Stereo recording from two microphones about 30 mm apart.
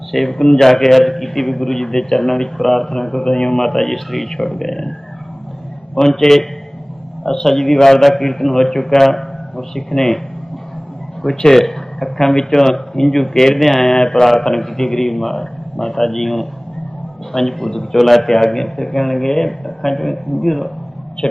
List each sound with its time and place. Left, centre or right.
0.1 s speech: centre
0.3 s speech: left
0.6 s a man's voice: centre
3.2 s a man's voice: left
3.5 s a man's voice: centre
6.0 s a man's voice: centre
11.5 s a sound: centre
12.0 s a man's voice: centre
13.6 s mantra: centre
14.3 s a man's voice: centre